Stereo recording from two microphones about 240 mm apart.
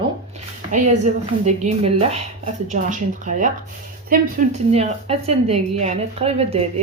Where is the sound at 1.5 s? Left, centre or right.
Right.